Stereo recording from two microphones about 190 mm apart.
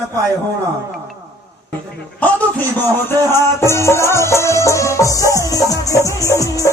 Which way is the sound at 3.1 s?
15° left (ahead or behind).